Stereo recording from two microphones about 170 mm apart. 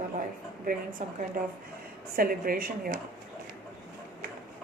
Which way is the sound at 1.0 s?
45° right (ahead or behind).